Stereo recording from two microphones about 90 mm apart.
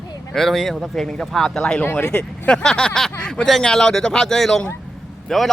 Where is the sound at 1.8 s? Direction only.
20° left (ahead or behind).